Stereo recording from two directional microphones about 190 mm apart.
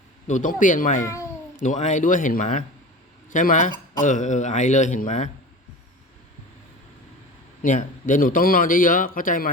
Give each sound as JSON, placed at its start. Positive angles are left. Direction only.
{"t": 0.3, "sound": "speech", "side_deg": 40}
{"t": 1.0, "sound": "a child's voice", "side_deg": 15}
{"t": 1.5, "sound": "a man's voice", "side_deg": 40}
{"t": 7.6, "sound": "a man's voice", "side_deg": 45}